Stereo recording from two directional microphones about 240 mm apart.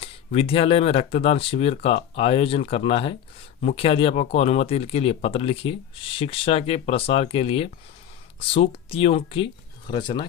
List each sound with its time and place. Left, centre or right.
0.0 s speech: left